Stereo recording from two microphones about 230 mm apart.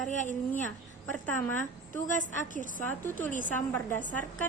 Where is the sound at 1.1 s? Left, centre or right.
Centre.